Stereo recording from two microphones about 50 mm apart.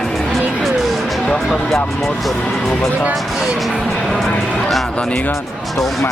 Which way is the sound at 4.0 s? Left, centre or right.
Centre.